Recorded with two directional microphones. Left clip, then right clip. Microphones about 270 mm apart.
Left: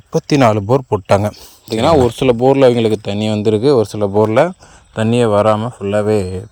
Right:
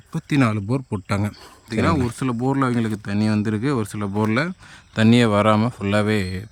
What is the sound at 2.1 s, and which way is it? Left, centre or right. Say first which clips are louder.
Speech: left 13 dB; centre.